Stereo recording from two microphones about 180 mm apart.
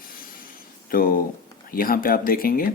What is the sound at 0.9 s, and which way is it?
Speech, 50° left (ahead or behind).